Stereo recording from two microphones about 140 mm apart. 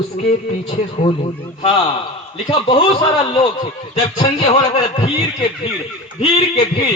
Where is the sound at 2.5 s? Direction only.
35° left (ahead or behind).